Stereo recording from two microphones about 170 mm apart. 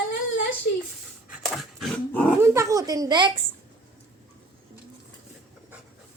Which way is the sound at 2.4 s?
15° right (ahead or behind).